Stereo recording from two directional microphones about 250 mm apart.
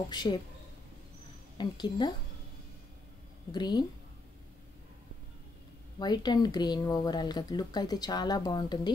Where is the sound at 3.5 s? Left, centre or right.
Centre.